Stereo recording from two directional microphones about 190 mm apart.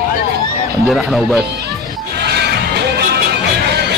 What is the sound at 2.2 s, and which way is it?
Music, 60° right (ahead or behind).